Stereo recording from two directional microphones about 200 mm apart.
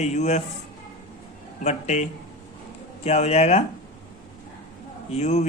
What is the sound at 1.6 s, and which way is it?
A man's voice, 35° left (ahead or behind).